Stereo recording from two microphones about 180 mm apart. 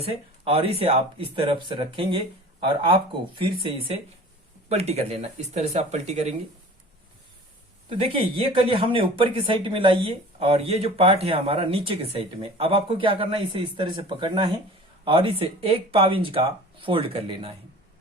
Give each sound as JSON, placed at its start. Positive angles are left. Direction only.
{"t": 0.4, "sound": "speech", "side_deg": -30}
{"t": 7.9, "sound": "speech", "side_deg": -30}